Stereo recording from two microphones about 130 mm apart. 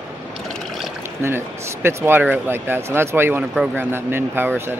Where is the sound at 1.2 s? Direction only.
20° right (ahead or behind).